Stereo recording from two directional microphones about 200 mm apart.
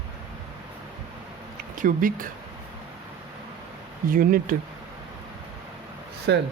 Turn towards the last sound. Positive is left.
turn(degrees=-60)  # may be behind; listen again after turning